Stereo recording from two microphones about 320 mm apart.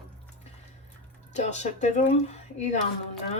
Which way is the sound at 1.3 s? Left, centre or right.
Left.